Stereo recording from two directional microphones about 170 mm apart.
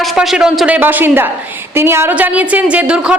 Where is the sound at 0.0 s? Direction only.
5° right (ahead or behind).